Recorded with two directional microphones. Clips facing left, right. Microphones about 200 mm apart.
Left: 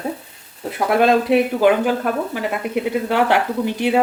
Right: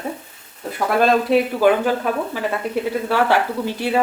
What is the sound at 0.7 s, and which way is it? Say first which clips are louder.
Speech: left 2 dB; 20° left (ahead or behind).